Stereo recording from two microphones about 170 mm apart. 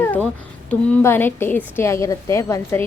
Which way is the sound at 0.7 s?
10° left (ahead or behind).